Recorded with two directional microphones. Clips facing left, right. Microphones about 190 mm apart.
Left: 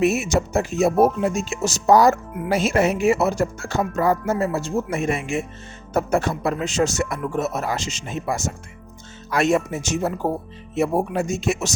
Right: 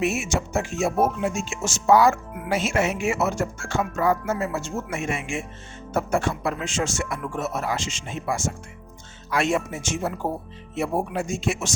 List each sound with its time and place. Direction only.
0.0 s speech: 40° left (ahead or behind)